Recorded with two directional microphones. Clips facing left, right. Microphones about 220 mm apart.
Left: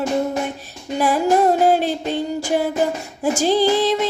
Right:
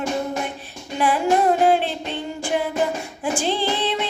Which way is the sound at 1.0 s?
40° left (ahead or behind).